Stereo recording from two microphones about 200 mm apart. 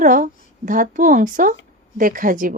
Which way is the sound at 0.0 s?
40° right (ahead or behind).